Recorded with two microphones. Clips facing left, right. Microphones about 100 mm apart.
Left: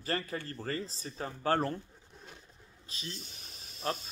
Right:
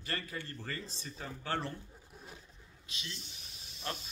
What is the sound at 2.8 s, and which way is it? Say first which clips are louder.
Speech: left 3 dB; 40° left (ahead or behind).